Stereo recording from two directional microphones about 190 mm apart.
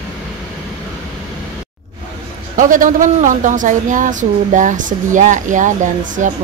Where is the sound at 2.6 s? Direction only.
45° right (ahead or behind).